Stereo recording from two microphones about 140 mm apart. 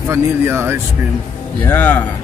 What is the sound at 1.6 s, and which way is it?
Speech, 15° left (ahead or behind).